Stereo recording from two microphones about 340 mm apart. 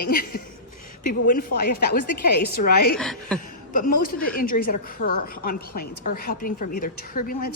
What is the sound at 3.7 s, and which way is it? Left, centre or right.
A woman's voice, left.